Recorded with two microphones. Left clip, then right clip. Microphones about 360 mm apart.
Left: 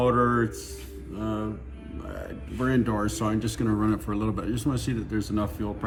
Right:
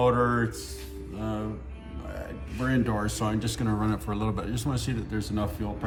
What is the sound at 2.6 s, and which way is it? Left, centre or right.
Speech, centre.